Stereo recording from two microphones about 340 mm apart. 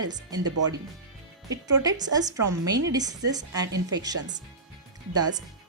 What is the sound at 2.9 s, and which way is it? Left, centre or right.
A woman's voice, centre.